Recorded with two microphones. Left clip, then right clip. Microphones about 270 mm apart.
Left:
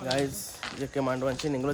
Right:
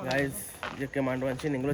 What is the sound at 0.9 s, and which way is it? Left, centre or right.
Speech, centre.